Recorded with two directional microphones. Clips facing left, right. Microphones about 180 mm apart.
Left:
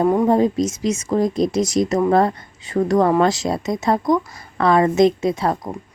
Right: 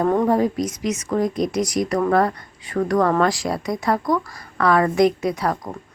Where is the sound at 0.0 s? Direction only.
10° left (ahead or behind).